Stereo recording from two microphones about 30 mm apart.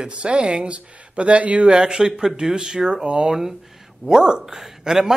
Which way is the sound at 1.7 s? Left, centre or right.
Right.